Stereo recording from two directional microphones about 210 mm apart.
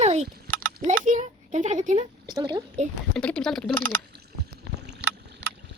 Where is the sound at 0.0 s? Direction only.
30° right (ahead or behind).